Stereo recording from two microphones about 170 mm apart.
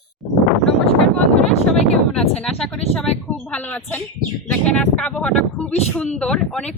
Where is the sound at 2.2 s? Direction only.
5° left (ahead or behind).